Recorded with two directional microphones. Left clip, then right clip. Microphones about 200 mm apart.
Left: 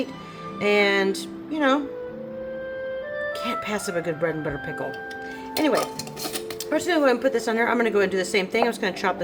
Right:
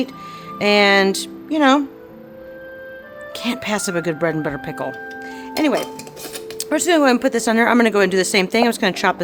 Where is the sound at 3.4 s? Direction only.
55° right (ahead or behind).